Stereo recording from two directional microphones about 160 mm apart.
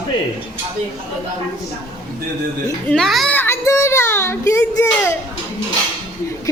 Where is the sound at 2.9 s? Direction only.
Centre (ahead or behind).